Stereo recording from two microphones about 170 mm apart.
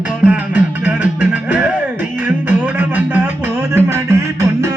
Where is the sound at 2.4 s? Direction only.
10° right (ahead or behind).